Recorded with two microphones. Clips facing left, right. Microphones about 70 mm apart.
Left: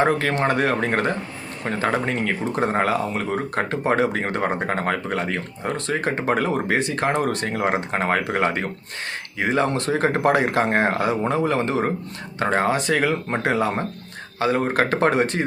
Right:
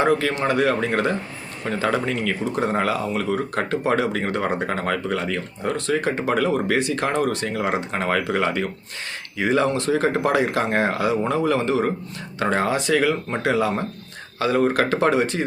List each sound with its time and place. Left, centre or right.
0.0 s a man's voice: left